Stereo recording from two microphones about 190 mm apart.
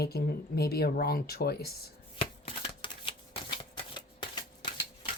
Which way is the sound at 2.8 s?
30° left (ahead or behind).